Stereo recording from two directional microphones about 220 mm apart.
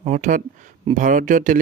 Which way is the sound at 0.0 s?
35° right (ahead or behind).